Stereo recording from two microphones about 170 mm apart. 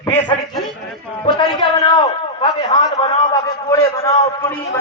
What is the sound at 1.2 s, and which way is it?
A man's voice, 30° left (ahead or behind).